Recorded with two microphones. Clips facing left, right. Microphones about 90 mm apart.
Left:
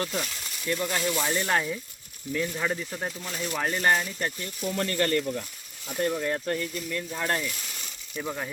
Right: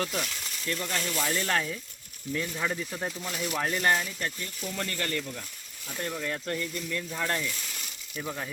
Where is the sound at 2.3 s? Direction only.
Centre (ahead or behind).